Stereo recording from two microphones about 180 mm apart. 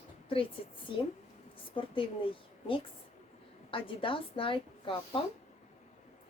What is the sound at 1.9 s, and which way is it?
A woman's voice, 30° left (ahead or behind).